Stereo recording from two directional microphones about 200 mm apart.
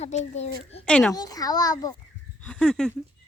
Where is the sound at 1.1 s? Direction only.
20° left (ahead or behind).